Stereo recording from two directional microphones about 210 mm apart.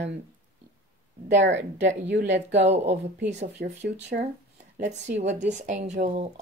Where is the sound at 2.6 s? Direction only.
30° right (ahead or behind).